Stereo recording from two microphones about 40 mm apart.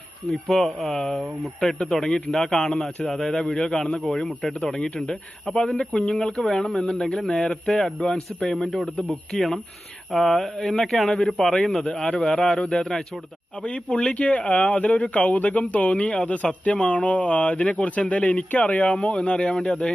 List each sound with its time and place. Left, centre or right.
0.3 s a man's voice: centre
6.4 s speech: centre
13.7 s speech: left